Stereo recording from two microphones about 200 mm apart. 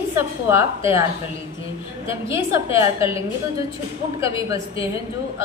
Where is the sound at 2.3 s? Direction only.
15° right (ahead or behind).